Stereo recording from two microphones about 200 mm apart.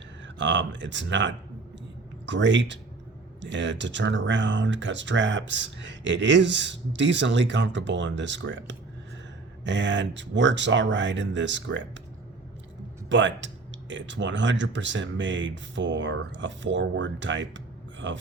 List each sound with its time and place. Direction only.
0.3 s speech: 65° right (ahead or behind)
13.1 s speech: 65° right (ahead or behind)